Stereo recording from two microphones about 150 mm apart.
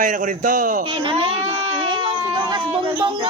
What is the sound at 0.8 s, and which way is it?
Baby cry, 35° right (ahead or behind).